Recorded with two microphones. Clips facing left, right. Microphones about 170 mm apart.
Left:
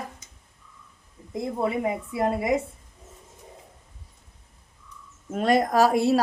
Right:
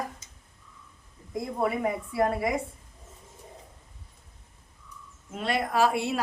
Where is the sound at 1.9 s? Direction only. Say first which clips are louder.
Left 1 dB; 20° left (ahead or behind).